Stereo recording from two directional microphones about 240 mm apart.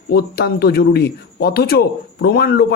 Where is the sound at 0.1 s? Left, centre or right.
Left.